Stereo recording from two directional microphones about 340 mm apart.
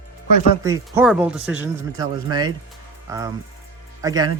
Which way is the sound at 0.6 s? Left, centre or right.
Centre.